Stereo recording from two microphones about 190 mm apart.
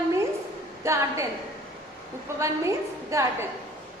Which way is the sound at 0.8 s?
15° right (ahead or behind).